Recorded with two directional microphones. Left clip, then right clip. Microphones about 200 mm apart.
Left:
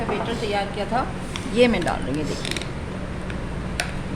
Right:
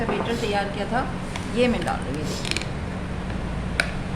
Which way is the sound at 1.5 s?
40° left (ahead or behind).